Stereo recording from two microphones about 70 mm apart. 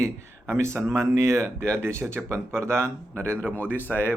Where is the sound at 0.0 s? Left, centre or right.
Right.